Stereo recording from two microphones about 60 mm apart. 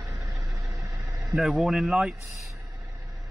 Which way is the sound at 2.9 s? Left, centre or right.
Right.